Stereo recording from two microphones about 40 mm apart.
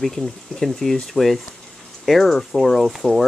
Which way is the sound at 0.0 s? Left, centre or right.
Centre.